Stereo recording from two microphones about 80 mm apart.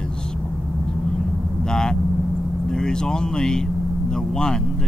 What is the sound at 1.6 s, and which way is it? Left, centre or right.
Speech, centre.